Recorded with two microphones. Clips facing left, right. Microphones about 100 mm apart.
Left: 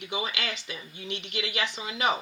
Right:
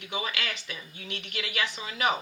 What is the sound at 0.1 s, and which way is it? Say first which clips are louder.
Speech: even; 20° left (ahead or behind).